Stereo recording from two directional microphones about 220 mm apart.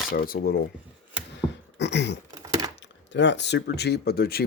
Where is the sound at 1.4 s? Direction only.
10° left (ahead or behind).